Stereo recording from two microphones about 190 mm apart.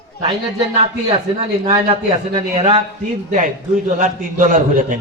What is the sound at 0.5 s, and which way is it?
A man's voice, 35° right (ahead or behind).